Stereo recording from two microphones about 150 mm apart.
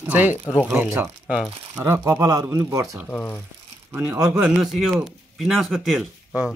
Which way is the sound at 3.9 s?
15° right (ahead or behind).